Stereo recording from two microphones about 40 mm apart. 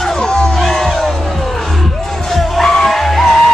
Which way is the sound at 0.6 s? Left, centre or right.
Centre.